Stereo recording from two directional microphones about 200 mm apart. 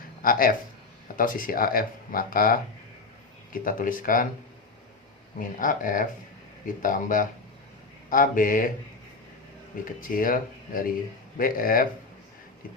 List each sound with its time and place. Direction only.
0.2 s speech: 45° left (ahead or behind)
5.4 s speech: 40° left (ahead or behind)
10.0 s speech: 45° left (ahead or behind)